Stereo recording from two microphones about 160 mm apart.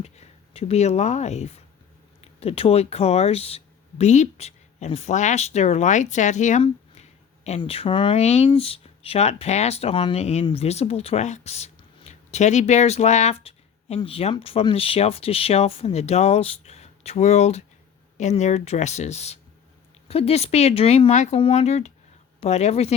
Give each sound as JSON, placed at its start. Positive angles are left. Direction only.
{"t": 0.0, "sound": "speech", "side_deg": 40}
{"t": 7.6, "sound": "speech", "side_deg": 35}